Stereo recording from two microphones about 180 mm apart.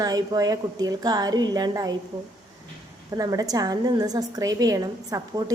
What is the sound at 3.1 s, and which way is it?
A woman's voice, 20° right (ahead or behind).